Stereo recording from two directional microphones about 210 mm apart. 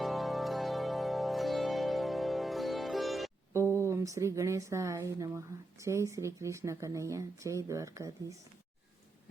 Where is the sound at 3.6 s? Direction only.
10° left (ahead or behind).